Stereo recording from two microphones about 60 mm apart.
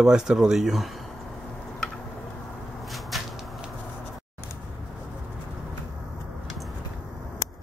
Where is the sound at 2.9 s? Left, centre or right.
Centre.